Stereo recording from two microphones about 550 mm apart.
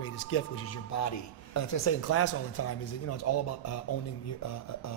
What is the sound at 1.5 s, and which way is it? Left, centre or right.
Speech, left.